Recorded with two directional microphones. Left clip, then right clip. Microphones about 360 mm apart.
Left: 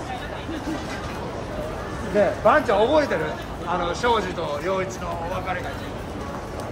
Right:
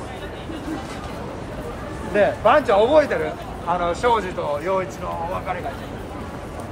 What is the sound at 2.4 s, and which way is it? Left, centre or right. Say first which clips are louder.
Speech: right 2 dB; right.